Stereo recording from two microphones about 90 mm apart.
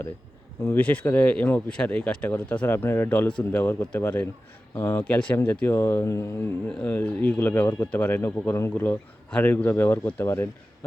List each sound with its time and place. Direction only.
0.8 s speech: 15° left (ahead or behind); by 6.3 s 30° left (ahead or behind)
6.7 s speech: 10° left (ahead or behind)
6.9 s speech: 20° left (ahead or behind)